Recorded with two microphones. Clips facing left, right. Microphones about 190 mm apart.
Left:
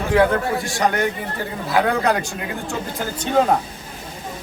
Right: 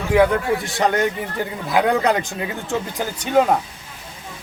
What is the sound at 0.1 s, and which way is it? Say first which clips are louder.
A man's voice: right 1 dB; 15° right (ahead or behind).